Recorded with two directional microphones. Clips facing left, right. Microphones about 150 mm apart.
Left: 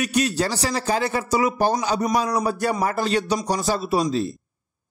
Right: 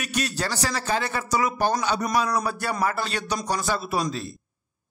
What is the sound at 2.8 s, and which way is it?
A man's voice, 35° left (ahead or behind).